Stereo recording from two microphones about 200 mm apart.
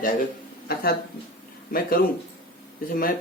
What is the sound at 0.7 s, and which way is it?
Speech, 50° left (ahead or behind).